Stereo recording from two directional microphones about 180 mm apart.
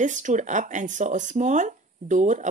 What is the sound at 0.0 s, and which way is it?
Speech, 45° right (ahead or behind).